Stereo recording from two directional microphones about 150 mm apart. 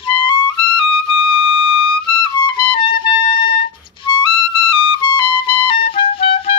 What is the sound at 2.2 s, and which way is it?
Music, 30° left (ahead or behind).